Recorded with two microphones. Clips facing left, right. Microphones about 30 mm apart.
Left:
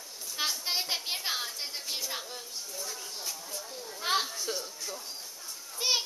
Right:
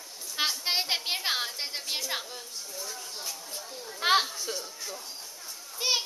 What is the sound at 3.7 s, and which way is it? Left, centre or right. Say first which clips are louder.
Children playing: right 1 dB; centre.